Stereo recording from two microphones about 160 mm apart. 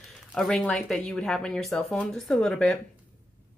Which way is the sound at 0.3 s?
5° left (ahead or behind).